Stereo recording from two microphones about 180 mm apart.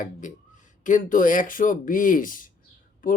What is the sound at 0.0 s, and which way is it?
Speech, 45° left (ahead or behind).